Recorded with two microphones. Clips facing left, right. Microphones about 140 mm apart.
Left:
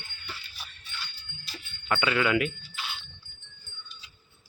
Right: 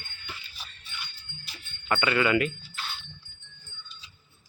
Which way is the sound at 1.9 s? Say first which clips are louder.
Right 1 dB; centre (ahead or behind).